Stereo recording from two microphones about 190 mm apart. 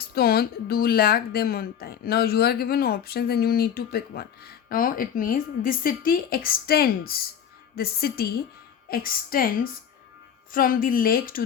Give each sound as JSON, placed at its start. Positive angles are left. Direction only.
{"t": 0.0, "sound": "speech", "side_deg": 55}
{"t": 10.5, "sound": "speech", "side_deg": 50}